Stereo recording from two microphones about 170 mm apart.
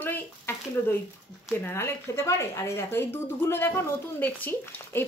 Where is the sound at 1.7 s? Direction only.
15° left (ahead or behind).